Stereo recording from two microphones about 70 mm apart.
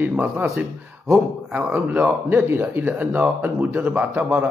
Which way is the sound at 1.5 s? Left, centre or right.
Right.